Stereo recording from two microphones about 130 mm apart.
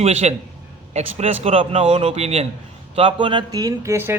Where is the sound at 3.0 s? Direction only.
40° right (ahead or behind); by 4.2 s 20° right (ahead or behind).